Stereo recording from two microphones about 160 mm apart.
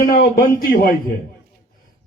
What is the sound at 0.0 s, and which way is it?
Speech, 65° left (ahead or behind).